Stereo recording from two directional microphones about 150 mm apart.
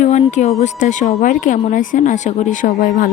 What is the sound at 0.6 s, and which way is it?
A woman's voice, 55° left (ahead or behind).